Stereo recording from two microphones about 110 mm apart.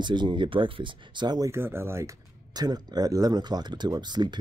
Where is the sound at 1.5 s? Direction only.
20° right (ahead or behind).